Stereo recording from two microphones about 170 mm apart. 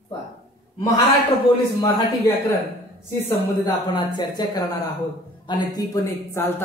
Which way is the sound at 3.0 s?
15° left (ahead or behind).